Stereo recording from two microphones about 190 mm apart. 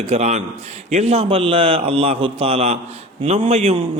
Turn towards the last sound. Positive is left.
turn(degrees=-30)  # may be behind; listen again after turning